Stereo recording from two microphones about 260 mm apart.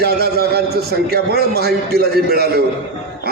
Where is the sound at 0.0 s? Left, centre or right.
Right.